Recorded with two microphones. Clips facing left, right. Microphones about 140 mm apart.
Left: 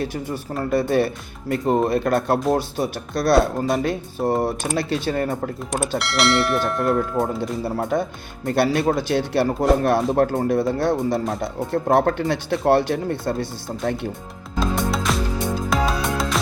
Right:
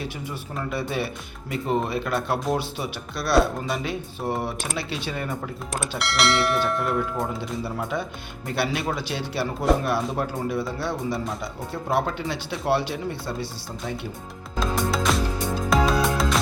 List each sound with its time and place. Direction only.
0.0 s speech: 40° left (ahead or behind)
6.0 s speech: centre (ahead or behind)
7.2 s speech: 25° left (ahead or behind)
7.6 s speech: 45° left (ahead or behind)
14.6 s music: centre (ahead or behind)